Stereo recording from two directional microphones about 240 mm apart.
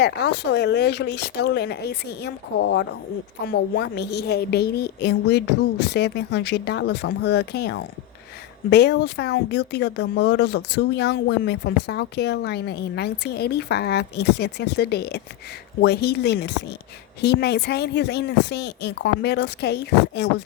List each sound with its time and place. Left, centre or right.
0.0 s speech: left